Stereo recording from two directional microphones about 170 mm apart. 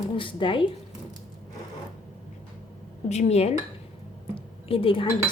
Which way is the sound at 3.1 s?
40° left (ahead or behind).